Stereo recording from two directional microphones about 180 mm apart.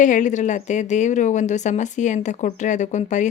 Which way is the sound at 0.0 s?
45° left (ahead or behind).